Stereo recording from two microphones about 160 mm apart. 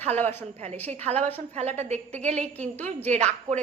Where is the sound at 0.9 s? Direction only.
45° right (ahead or behind).